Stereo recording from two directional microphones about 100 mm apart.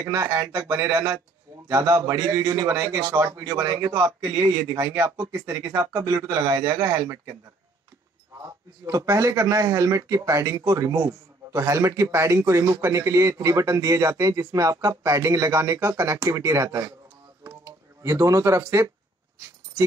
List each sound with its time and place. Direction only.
0.0 s speech: 30° right (ahead or behind)
8.5 s speech: 30° right (ahead or behind)
17.4 s a sound: 30° right (ahead or behind)